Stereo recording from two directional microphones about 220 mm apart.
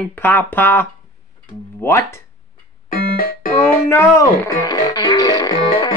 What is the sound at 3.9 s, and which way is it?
Speech, 15° left (ahead or behind).